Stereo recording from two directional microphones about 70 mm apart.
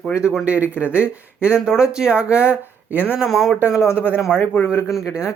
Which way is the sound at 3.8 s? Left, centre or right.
Left.